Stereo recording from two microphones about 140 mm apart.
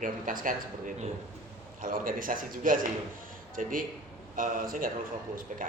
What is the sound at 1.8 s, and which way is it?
Speech, 85° right.